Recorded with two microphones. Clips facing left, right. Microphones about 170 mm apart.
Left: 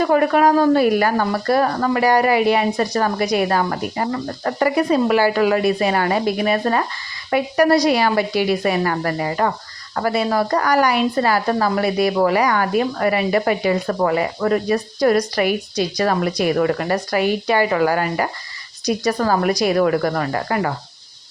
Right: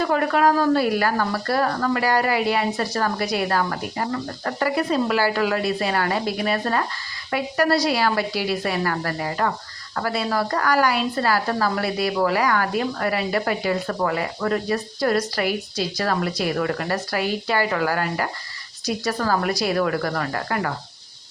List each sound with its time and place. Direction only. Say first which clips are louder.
0.0 s speech: left 4 dB; 15° left (ahead or behind)